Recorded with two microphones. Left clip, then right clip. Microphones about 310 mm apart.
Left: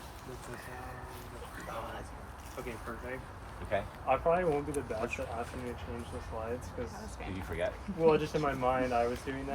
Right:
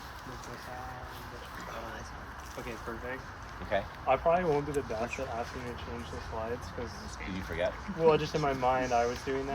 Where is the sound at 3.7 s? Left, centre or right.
Right.